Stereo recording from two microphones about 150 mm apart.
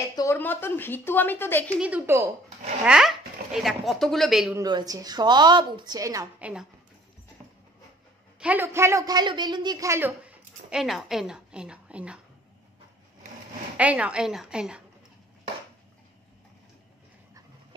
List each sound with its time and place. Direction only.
0.1 s speech: 25° left (ahead or behind)
1.8 s speech: 10° right (ahead or behind)
4.6 s a woman's voice: 25° right (ahead or behind)
6.4 s speech: 5° right (ahead or behind)
8.4 s a man's voice: 10° right (ahead or behind)
13.7 s speech: 10° right (ahead or behind)